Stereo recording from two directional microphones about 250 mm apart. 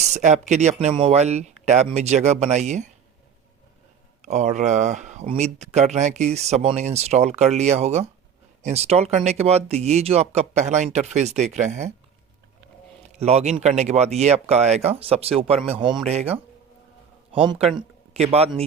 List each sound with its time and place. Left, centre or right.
0.1 s speech: right
4.2 s speech: right
13.1 s speech: right
17.3 s speech: right